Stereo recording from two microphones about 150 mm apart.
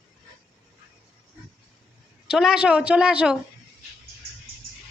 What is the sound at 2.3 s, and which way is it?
A woman's voice, 5° right (ahead or behind).